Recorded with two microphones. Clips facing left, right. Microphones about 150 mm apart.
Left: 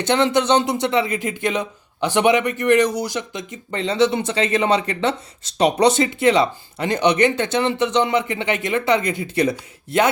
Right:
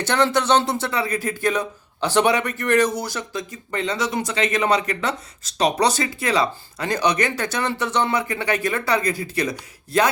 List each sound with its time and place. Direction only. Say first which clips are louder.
0.0 s speech: left 2 dB; 20° left (ahead or behind)